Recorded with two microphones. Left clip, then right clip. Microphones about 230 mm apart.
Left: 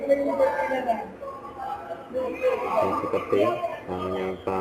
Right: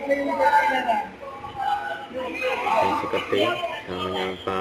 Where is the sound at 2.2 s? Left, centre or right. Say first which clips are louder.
Left 1 dB; centre.